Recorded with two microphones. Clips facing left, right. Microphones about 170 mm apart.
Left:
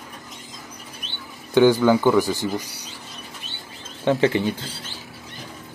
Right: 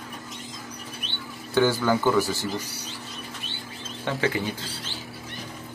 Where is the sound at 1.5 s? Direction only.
15° left (ahead or behind).